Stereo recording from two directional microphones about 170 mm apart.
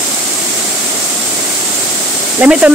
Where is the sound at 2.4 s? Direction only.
10° right (ahead or behind).